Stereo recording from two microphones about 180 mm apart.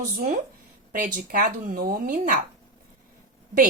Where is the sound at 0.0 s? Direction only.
45° right (ahead or behind).